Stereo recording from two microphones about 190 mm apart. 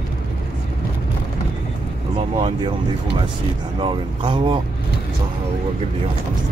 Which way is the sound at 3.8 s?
25° right (ahead or behind).